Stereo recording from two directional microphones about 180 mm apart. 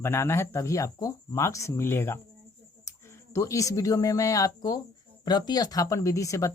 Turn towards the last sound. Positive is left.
turn(degrees=20)  # may be behind; listen again after turning